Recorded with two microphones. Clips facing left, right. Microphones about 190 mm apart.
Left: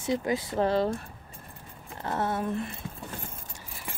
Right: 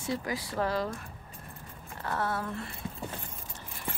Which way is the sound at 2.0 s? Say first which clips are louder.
Left 3 dB; 20° left (ahead or behind).